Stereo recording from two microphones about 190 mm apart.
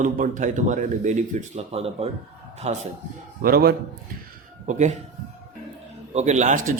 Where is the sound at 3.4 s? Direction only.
55° right (ahead or behind).